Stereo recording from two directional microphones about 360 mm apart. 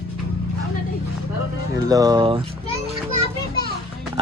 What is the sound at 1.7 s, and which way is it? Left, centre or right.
Speech, centre.